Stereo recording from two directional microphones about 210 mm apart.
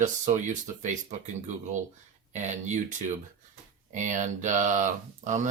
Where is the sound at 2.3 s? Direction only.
35° right (ahead or behind).